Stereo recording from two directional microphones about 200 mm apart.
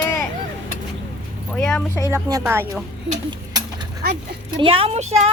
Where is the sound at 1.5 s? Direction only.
10° left (ahead or behind).